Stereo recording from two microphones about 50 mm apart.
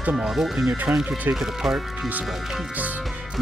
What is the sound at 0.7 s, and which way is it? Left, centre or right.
Speech, right.